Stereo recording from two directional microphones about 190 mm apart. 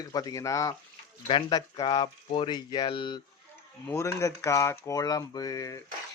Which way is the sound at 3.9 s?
15° left (ahead or behind).